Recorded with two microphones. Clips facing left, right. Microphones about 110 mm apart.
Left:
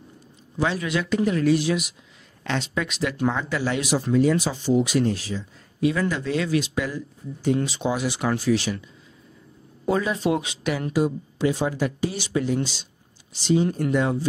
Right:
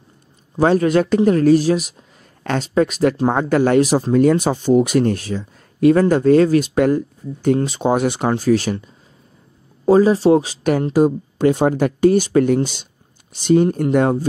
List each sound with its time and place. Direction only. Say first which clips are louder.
0.6 s speech: right 10 dB; 45° right (ahead or behind)
8.2 s speech: right 6 dB; 40° right (ahead or behind)
9.8 s speech: right 11 dB; 35° right (ahead or behind); by 14.2 s 50° right (ahead or behind)